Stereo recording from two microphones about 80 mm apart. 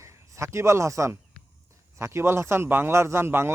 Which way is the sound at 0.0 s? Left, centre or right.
Right.